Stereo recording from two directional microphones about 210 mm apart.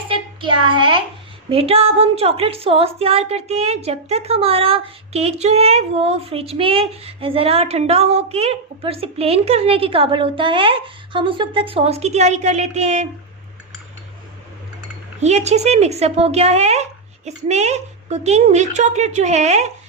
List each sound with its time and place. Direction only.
0.1 s a sound: 25° right (ahead or behind)
1.5 s a woman's voice: 30° right (ahead or behind)
15.2 s a woman's voice: 30° right (ahead or behind)